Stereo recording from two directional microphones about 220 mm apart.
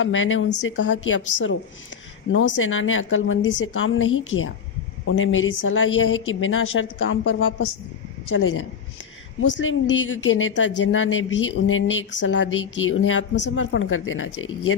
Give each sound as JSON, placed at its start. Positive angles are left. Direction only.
{"t": 0.0, "sound": "a woman's voice", "side_deg": 60}